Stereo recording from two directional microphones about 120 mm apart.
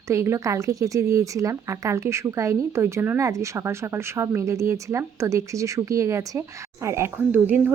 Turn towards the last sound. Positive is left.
turn(degrees=-15)  # may be behind; listen again after turning